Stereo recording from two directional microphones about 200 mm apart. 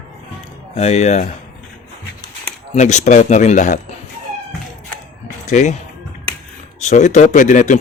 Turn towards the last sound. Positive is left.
turn(degrees=40)  # may be behind; listen again after turning